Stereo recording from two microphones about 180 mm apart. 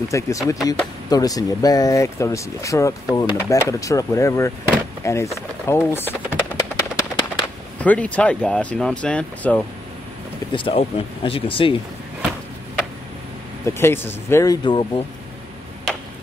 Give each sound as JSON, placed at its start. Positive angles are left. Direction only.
{"t": 0.1, "sound": "speech", "side_deg": 20}
{"t": 5.7, "sound": "a sound", "side_deg": 15}
{"t": 7.8, "sound": "speech", "side_deg": 10}
{"t": 10.5, "sound": "speech", "side_deg": 30}
{"t": 13.7, "sound": "speech", "side_deg": 15}